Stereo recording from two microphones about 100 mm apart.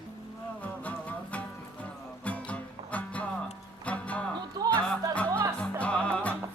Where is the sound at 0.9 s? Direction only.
15° left (ahead or behind).